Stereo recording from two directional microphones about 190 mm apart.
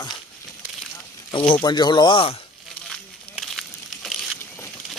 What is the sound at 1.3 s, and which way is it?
Speech, 25° left (ahead or behind).